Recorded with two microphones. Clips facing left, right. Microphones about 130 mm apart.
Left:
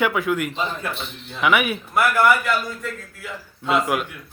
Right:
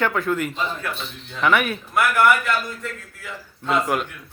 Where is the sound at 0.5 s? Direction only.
15° left (ahead or behind).